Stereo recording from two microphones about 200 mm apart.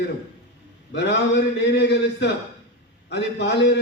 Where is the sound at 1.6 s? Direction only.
60° left (ahead or behind).